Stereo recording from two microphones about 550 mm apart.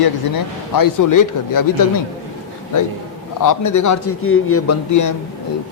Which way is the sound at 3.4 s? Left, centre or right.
Left.